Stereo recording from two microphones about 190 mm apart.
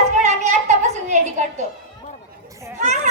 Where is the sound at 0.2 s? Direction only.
35° right (ahead or behind).